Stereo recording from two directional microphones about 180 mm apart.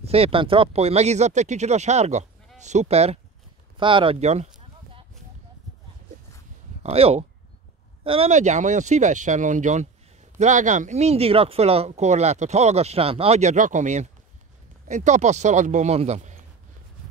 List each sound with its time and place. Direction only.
0.0 s speech: 35° right (ahead or behind)
6.8 s speech: 35° right (ahead or behind)